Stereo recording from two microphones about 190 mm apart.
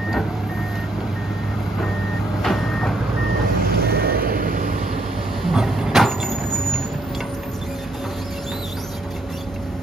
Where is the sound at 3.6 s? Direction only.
55° right (ahead or behind).